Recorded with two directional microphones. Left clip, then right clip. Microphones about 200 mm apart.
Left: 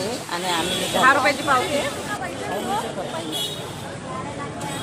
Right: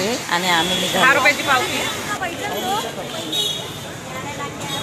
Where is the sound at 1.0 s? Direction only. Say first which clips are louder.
Right 2 dB; 10° left (ahead or behind).